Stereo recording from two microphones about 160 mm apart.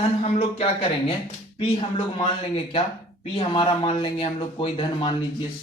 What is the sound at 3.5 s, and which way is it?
Speech, 35° left (ahead or behind).